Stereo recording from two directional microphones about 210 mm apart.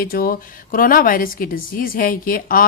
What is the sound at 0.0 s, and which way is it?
A woman's voice, 45° left (ahead or behind).